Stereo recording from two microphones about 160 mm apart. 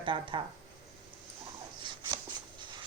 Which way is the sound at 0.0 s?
30° right (ahead or behind).